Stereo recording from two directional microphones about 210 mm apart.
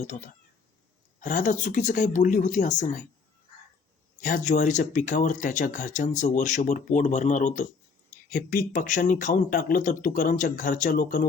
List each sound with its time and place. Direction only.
0.0 s speech: 35° left (ahead or behind)
4.2 s speech: 35° left (ahead or behind)